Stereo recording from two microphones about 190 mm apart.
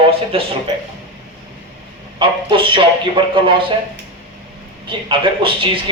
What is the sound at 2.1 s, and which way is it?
Speech, 25° right (ahead or behind).